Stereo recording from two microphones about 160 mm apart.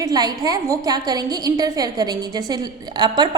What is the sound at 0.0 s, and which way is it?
A woman's voice, 25° right (ahead or behind).